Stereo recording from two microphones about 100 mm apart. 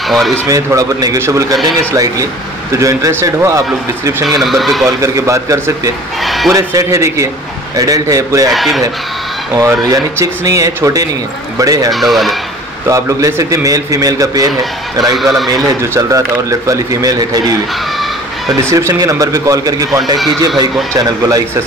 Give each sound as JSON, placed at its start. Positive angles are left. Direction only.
{"t": 0.5, "sound": "a man's voice", "side_deg": -35}
{"t": 4.4, "sound": "speech", "side_deg": 0}
{"t": 4.8, "sound": "a man's voice", "side_deg": -30}
{"t": 6.2, "sound": "sheep", "side_deg": 0}
{"t": 6.5, "sound": "a man's voice", "side_deg": -35}
{"t": 8.5, "sound": "speech", "side_deg": 0}
{"t": 9.6, "sound": "a man's voice", "side_deg": -35}
{"t": 11.9, "sound": "speech", "side_deg": 0}
{"t": 12.8, "sound": "a man's voice", "side_deg": -35}
{"t": 14.5, "sound": "speech", "side_deg": 0}
{"t": 15.9, "sound": "a man's voice", "side_deg": -30}
{"t": 18.6, "sound": "a man's voice", "side_deg": -30}